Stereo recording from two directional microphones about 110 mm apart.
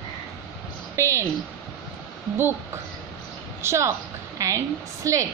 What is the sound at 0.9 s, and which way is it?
Speech, 25° right (ahead or behind).